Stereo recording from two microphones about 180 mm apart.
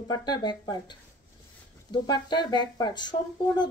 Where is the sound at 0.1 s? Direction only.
25° left (ahead or behind).